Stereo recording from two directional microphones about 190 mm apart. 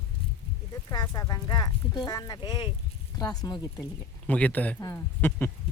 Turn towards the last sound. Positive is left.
turn(degrees=10)  # may be behind; listen again after turning